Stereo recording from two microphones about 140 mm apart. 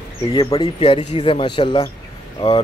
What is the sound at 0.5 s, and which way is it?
Speech, 35° left (ahead or behind).